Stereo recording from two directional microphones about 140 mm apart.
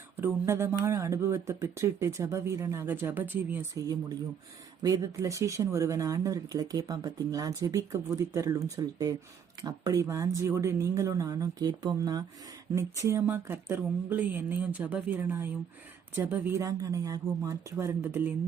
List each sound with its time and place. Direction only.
0.2 s speech: 20° right (ahead or behind)